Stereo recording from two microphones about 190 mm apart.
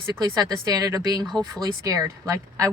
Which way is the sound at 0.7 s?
20° right (ahead or behind).